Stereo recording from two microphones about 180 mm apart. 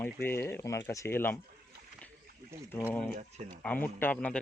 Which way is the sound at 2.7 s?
15° left (ahead or behind).